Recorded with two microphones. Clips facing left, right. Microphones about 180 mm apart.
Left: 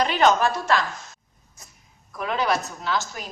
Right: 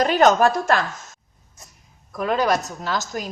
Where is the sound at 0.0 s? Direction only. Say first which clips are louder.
Right 4 dB; 45° right (ahead or behind).